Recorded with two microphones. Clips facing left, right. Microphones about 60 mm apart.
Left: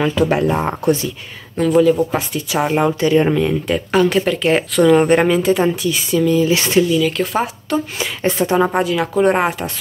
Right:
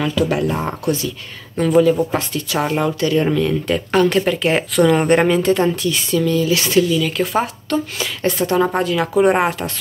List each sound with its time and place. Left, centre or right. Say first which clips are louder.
0.0 s speech: left 3 dB; left
1.6 s speech: left 1 dB; centre
2.1 s a woman's voice: left 1 dB; centre
2.8 s speech: left 4 dB; left
3.6 s speech: even; centre
6.4 s speech: left 2 dB; left
6.9 s speech: left 2 dB; centre
7.7 s a woman's voice: even; left; by 9.5 s centre